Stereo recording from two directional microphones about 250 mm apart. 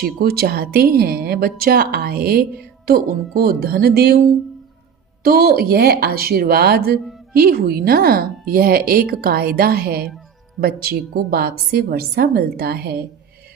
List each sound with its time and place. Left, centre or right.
0.0 s speech: right
5.2 s speech: right